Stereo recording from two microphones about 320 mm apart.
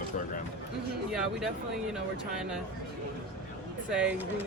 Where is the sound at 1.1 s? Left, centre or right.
Centre.